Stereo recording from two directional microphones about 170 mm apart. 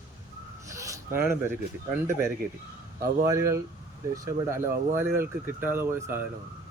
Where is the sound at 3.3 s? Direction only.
15° right (ahead or behind).